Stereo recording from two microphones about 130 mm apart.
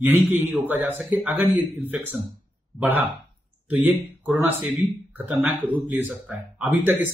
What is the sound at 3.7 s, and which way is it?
Speech, 15° right (ahead or behind).